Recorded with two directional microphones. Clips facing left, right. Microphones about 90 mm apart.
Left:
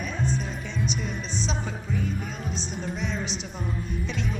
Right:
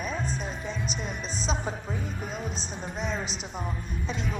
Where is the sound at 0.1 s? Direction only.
Centre (ahead or behind).